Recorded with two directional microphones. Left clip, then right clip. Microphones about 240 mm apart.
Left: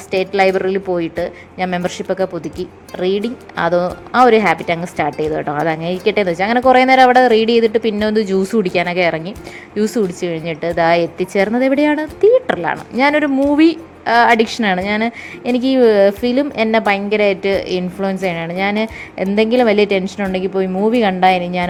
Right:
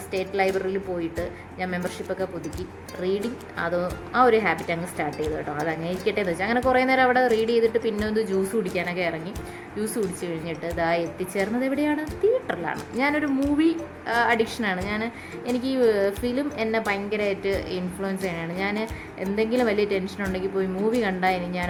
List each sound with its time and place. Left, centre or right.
0.1 s a woman's voice: left
3.6 s a woman's voice: left